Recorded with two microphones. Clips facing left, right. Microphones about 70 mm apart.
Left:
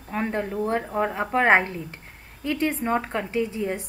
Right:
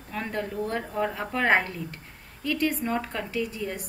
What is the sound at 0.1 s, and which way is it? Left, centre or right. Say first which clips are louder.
A woman's voice: left 4 dB; left.